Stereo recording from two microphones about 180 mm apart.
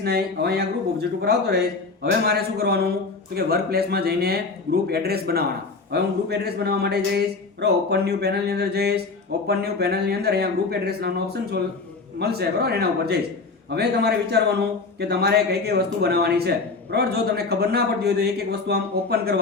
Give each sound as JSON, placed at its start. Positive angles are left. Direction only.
{"t": 0.0, "sound": "a man's voice", "side_deg": -65}